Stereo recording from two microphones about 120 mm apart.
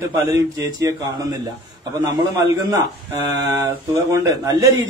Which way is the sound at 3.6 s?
25° right (ahead or behind).